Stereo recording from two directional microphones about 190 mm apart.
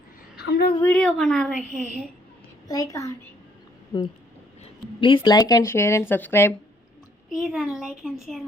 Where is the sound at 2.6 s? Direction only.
20° left (ahead or behind).